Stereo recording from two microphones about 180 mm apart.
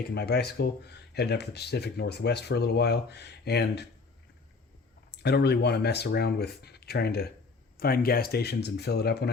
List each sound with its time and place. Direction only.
0.0 s speech: 65° left (ahead or behind)
5.1 s speech: 65° left (ahead or behind)